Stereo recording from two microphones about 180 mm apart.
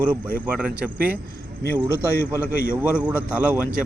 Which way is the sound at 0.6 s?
10° right (ahead or behind).